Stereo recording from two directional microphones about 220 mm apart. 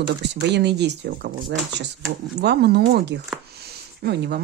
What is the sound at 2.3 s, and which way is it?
Speech, 50° right (ahead or behind).